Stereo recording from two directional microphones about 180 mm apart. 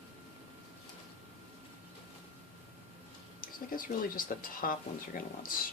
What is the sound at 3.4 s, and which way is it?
Speech, 50° left (ahead or behind).